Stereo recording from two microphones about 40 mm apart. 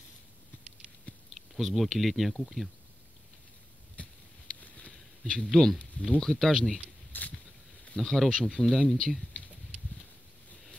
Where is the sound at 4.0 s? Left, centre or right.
Left.